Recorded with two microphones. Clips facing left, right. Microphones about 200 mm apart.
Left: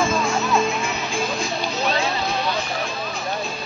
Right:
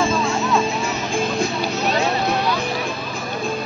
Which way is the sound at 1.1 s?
60° right (ahead or behind).